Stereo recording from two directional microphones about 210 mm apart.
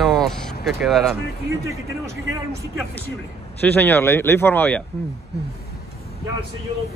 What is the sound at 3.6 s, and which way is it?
Speech, 10° left (ahead or behind).